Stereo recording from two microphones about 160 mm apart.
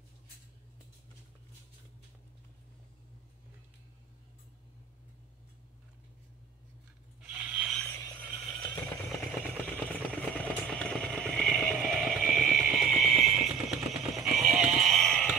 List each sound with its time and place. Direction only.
7.3 s mechanisms: 5° right (ahead or behind)
7.7 s vehicle: 10° left (ahead or behind)
9.8 s vehicle: 10° left (ahead or behind)